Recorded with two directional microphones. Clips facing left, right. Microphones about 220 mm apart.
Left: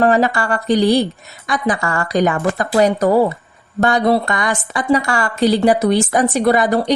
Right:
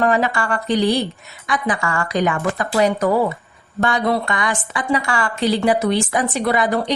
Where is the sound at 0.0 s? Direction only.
35° left (ahead or behind).